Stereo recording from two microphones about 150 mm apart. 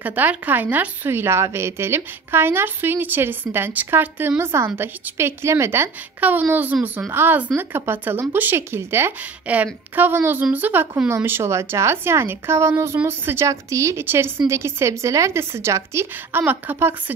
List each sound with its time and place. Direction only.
0.0 s speech: 10° right (ahead or behind)